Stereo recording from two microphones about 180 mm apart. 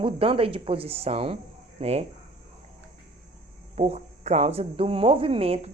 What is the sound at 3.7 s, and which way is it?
Speech, 35° right (ahead or behind).